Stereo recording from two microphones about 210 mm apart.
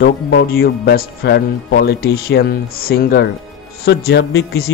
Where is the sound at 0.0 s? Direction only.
50° left (ahead or behind).